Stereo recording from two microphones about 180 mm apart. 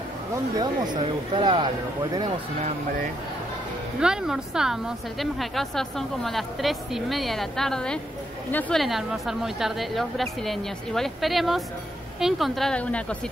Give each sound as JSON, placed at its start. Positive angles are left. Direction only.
{"t": 0.6, "sound": "speech", "side_deg": -25}
{"t": 4.0, "sound": "a woman's voice", "side_deg": -5}